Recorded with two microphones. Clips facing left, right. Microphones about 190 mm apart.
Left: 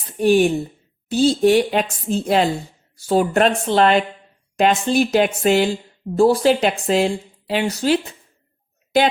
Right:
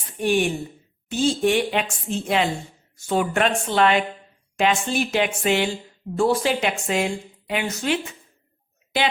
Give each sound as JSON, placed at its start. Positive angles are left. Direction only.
{"t": 0.2, "sound": "speech", "side_deg": 35}